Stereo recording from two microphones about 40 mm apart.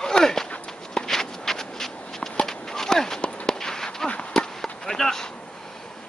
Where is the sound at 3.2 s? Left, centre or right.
Left.